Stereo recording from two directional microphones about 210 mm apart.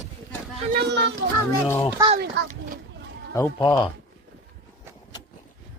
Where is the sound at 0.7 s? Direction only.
55° right (ahead or behind).